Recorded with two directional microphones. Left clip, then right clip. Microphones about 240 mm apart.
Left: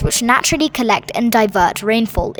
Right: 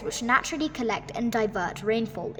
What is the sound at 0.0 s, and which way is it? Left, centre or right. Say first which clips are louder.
Speech: left 10 dB; left.